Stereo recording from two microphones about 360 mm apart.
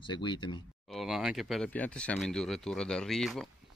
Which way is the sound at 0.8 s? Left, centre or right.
Centre.